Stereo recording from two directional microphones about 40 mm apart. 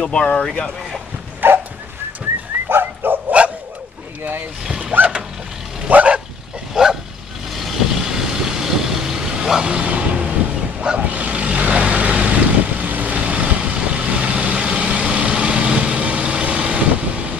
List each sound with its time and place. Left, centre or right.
0.0 s speech: left
0.5 s speech: centre
1.4 s dog: right
2.7 s dog: right
3.3 s dog: right
4.2 s speech: right
4.6 s a sound: centre
5.9 s bow-wow: right
6.7 s bow-wow: centre
7.5 s vehicle: centre
9.7 s music: right
11.0 s vehicle: right